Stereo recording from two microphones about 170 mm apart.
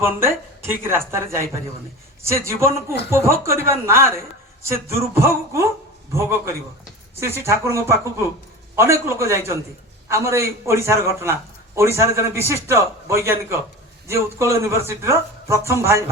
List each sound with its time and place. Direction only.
0.0 s a man's voice: 15° right (ahead or behind)